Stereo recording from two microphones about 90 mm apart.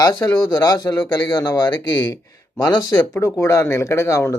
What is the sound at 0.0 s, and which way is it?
Speech, 45° left (ahead or behind).